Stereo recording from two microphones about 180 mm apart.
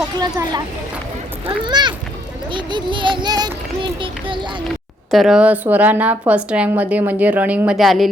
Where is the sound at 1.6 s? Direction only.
25° right (ahead or behind).